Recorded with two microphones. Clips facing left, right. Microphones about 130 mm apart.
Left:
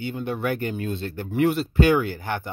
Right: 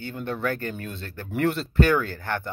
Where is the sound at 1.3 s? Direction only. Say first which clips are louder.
Left 3 dB; 5° left (ahead or behind).